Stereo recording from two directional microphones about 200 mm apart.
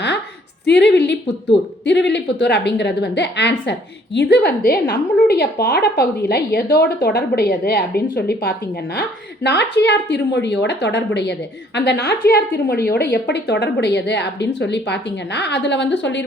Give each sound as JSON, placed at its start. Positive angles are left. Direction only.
{"t": 0.6, "sound": "a woman's voice", "side_deg": 60}